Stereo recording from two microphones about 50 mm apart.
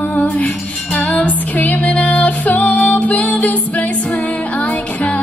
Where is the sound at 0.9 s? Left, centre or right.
Left.